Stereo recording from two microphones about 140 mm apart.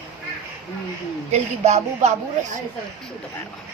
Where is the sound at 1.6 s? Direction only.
55° right (ahead or behind).